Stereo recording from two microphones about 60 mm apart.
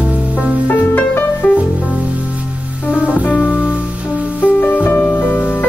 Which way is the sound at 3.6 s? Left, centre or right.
Right.